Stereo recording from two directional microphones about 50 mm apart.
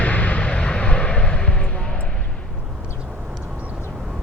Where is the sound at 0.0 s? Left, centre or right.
Left.